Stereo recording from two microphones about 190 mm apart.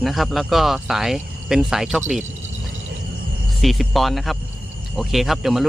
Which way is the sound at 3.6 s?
Centre (ahead or behind).